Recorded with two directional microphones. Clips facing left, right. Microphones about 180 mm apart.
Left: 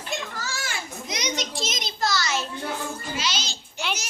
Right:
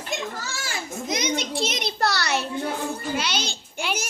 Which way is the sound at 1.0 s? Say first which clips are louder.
Right 4 dB; 50° right (ahead or behind).